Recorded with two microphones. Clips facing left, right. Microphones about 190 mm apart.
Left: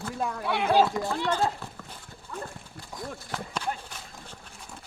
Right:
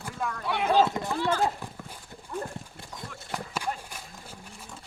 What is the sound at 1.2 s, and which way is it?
Speech, 10° right (ahead or behind).